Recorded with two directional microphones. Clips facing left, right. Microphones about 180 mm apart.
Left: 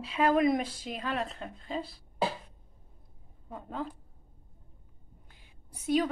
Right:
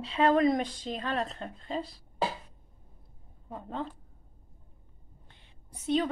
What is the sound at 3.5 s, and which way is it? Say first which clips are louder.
Speech: right 1 dB; 5° left (ahead or behind).